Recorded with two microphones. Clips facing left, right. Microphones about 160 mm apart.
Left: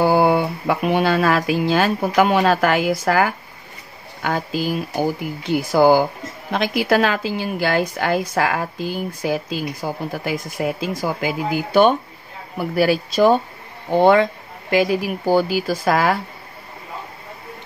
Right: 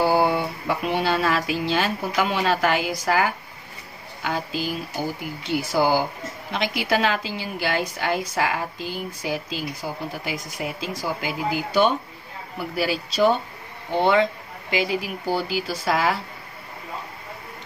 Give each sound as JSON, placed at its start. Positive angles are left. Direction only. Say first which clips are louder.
{"t": 0.0, "sound": "a woman's voice", "louder": "left 4 dB", "side_deg": 55}